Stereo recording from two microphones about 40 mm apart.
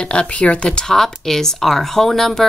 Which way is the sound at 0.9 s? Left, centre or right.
Centre.